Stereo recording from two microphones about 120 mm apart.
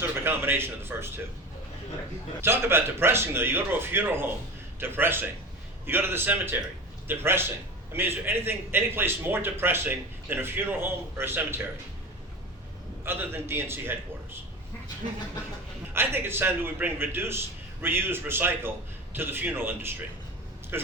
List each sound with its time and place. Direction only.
0.0 s a man's voice: 20° right (ahead or behind)
2.4 s a man's voice: 20° right (ahead or behind)
13.1 s a man's voice: 20° right (ahead or behind)
15.9 s a man's voice: 20° right (ahead or behind)